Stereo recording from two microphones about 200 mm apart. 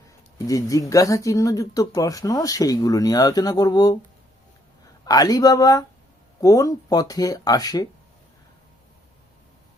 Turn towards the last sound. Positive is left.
turn(degrees=20)  # may be behind; listen again after turning